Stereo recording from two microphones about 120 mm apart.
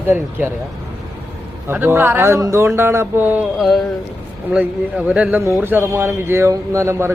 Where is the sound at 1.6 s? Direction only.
15° right (ahead or behind).